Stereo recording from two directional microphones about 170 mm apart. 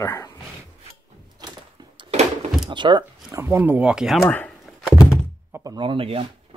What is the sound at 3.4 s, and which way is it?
Speech, 10° right (ahead or behind).